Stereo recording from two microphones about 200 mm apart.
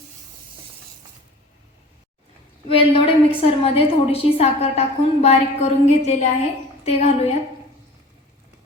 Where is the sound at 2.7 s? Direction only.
25° left (ahead or behind).